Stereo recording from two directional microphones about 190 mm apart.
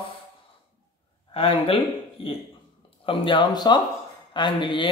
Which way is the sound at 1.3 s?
30° left (ahead or behind).